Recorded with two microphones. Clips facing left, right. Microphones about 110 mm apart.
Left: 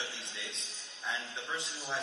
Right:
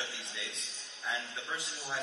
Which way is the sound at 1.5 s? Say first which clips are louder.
Left 2 dB; 25° left (ahead or behind).